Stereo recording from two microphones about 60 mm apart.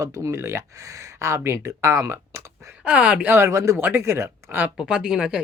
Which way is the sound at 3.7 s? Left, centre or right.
Right.